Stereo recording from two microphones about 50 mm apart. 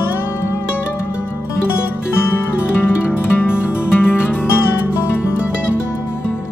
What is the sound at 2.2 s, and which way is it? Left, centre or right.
Music, left.